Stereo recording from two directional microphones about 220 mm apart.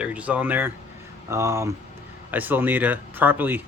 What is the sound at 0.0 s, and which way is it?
Speech, 5° right (ahead or behind).